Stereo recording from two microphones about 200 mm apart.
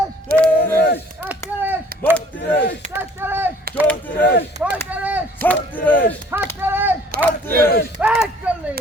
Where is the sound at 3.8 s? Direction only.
10° left (ahead or behind).